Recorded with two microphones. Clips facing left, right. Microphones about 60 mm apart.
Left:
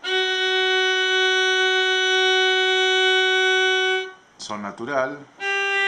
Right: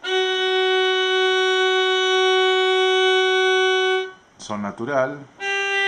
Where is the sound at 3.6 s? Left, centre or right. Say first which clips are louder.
Right 2 dB; centre.